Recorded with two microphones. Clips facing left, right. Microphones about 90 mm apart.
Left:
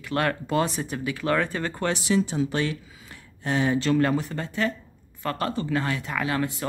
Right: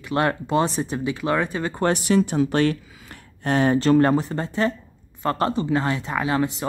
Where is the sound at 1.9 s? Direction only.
55° right (ahead or behind).